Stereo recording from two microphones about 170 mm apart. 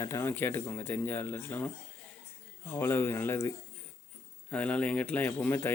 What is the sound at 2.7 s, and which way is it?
Speech, 15° left (ahead or behind).